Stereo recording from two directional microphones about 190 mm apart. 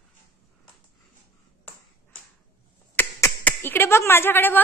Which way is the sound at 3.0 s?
10° left (ahead or behind).